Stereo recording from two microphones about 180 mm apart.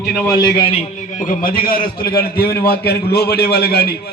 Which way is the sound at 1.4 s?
50° left (ahead or behind).